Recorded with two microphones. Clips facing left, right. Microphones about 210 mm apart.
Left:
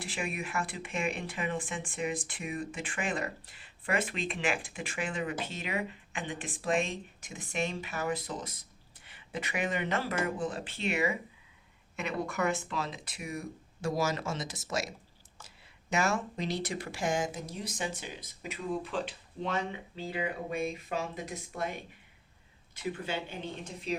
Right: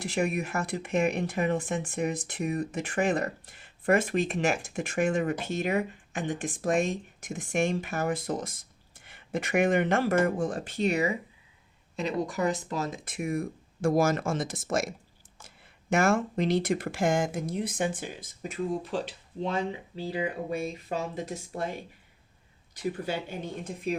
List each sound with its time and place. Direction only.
0.3 s speech: 40° right (ahead or behind)
12.3 s speech: 35° right (ahead or behind)
18.7 s speech: 35° right (ahead or behind)
23.6 s speech: 55° right (ahead or behind)